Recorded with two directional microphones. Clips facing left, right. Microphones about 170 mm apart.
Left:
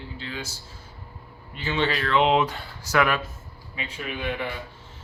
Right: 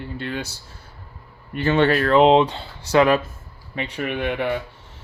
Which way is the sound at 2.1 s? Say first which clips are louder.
Right 6 dB; 40° right (ahead or behind).